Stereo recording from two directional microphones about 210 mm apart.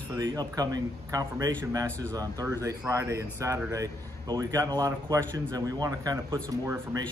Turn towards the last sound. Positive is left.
turn(degrees=-15)  # may be behind; listen again after turning